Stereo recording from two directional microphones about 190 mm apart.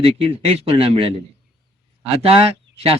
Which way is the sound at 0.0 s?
30° right (ahead or behind).